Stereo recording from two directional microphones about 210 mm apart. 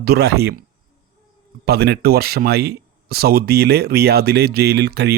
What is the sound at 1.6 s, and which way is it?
Speech, 50° right (ahead or behind).